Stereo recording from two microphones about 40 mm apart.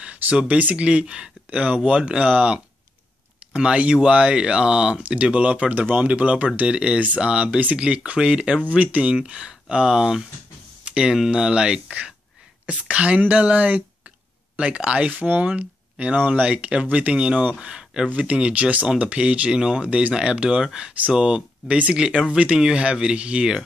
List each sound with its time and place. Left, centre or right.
0.0 s a sound: right
0.6 s speech: right
5.0 s speech: right
5.8 s speech: right
8.6 s speech: right
9.1 s speech: right
10.9 s a sound: right
11.2 s speech: right
12.6 s speech: right
18.1 s speech: right
21.6 s speech: right
21.9 s speech: right